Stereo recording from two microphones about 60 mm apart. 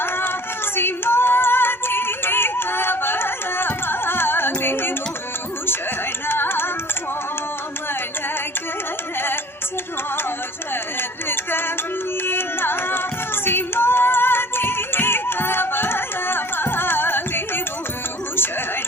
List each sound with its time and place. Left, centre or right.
0.0 s a sound: left
0.8 s music: left
6.2 s music: left
12.2 s singing: left